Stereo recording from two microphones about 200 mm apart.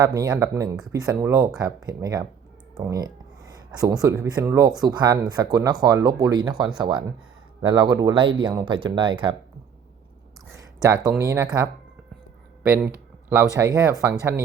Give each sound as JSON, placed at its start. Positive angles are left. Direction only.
{"t": 0.0, "sound": "speech", "side_deg": -20}
{"t": 10.8, "sound": "speech", "side_deg": -20}